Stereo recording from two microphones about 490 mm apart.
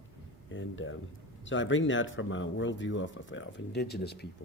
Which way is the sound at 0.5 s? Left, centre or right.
Left.